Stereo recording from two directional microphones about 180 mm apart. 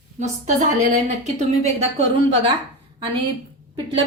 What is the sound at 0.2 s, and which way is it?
A woman's voice, 45° right (ahead or behind).